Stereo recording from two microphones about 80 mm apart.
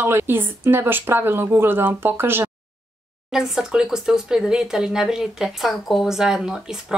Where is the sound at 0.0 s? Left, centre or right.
Right.